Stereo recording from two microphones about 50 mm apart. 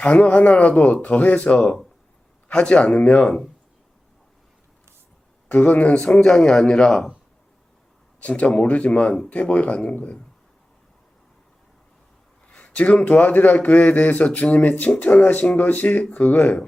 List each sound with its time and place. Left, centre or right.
0.0 s a man's voice: left
5.5 s speech: left; by 7.1 s centre
8.2 s a man's voice: left
12.5 s a man's voice: left